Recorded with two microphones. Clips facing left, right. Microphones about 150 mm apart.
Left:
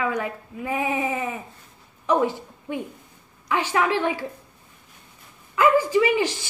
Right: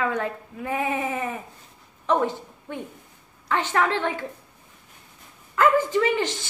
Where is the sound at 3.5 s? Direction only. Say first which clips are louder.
Left 1 dB; 10° left (ahead or behind).